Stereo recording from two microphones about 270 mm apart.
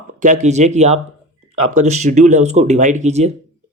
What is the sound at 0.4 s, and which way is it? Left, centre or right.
Speech, right.